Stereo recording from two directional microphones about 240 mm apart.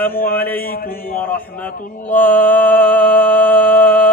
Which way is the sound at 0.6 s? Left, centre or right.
Left.